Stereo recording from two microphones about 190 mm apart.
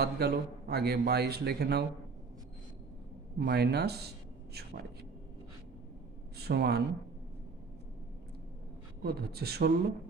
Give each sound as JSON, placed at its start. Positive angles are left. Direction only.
{"t": 0.0, "sound": "a man's voice", "side_deg": -55}
{"t": 3.3, "sound": "a man's voice", "side_deg": -60}
{"t": 6.3, "sound": "speech", "side_deg": -60}
{"t": 9.0, "sound": "a man's voice", "side_deg": -55}